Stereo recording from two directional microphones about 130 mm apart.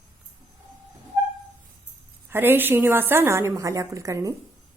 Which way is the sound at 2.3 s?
15° right (ahead or behind).